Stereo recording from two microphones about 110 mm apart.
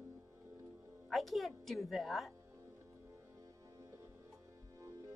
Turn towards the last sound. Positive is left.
turn(degrees=-30)  # may be behind; listen again after turning